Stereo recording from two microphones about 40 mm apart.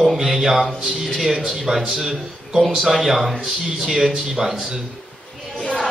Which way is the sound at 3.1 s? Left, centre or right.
Centre.